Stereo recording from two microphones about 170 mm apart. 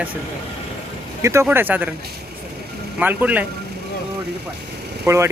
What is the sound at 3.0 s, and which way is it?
Speech, 10° right (ahead or behind).